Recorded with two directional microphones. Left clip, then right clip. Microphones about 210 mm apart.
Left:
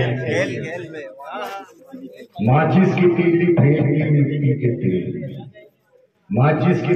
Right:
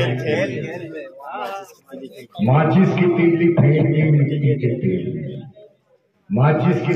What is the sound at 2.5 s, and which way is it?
A man's voice, 40° left (ahead or behind).